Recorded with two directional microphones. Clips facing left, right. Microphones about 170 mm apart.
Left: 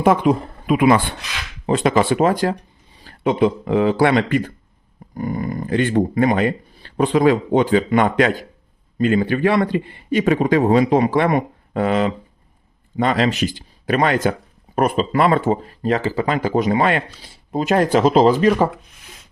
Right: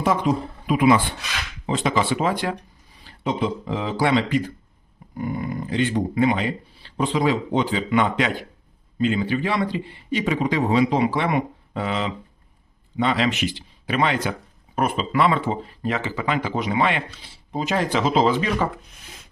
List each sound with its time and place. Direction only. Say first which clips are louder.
0.0 s speech: left 6 dB; 55° left (ahead or behind)
3.0 s speech: left 7 dB; 55° left (ahead or behind)
5.1 s speech: left 3 dB; 45° left (ahead or behind)